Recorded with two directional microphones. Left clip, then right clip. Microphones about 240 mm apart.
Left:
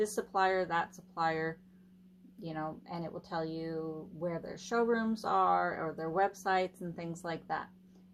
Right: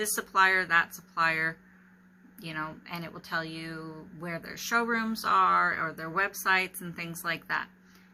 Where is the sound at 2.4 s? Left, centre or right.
Centre.